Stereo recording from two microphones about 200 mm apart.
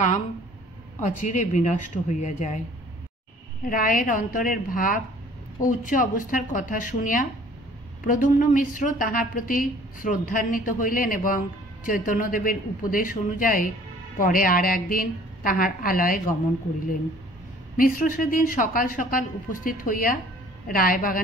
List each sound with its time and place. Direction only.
1.0 s speech: 40° left (ahead or behind)
3.6 s a woman's voice: 45° left (ahead or behind)
17.7 s a woman's voice: 45° left (ahead or behind)